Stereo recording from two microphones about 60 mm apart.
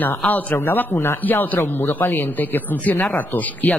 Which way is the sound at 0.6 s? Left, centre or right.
Left.